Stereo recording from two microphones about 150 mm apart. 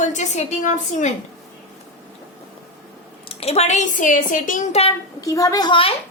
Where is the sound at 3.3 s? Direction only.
45° left (ahead or behind).